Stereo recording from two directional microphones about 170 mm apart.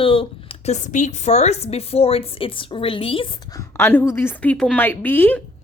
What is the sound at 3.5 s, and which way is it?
A woman's voice, 10° left (ahead or behind).